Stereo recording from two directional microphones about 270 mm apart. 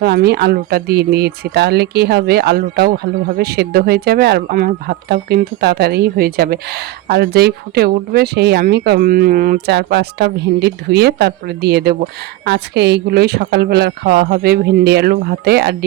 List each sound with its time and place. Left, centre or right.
0.0 s speech: right